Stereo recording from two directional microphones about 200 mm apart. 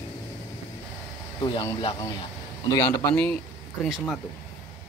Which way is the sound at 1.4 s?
25° left (ahead or behind).